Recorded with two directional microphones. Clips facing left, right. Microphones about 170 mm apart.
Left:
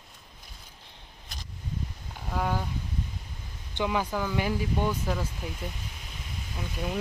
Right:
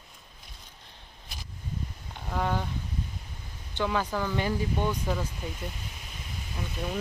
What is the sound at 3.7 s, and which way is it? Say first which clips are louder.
Speech: even; 15° left (ahead or behind).